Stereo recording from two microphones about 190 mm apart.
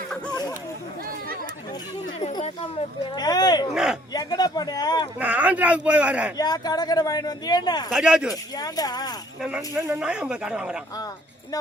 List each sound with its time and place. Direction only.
0.3 s a sound: 20° left (ahead or behind)
2.4 s speech: 25° left (ahead or behind)
5.2 s a man's voice: 10° right (ahead or behind)
6.3 s speech: 20° left (ahead or behind)
7.9 s speech: 5° right (ahead or behind)
8.5 s speech: 20° left (ahead or behind)
9.7 s a man's voice: 15° right (ahead or behind)
10.0 s speech: 5° right (ahead or behind)